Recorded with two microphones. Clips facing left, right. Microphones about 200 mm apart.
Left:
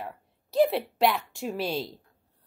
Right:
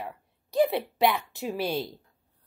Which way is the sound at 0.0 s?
Centre (ahead or behind).